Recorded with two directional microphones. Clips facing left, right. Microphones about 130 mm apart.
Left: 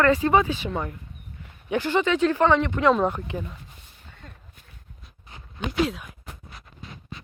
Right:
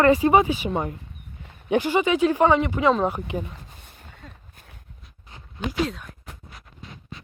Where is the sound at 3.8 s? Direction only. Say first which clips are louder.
Right 4 dB; 55° right (ahead or behind).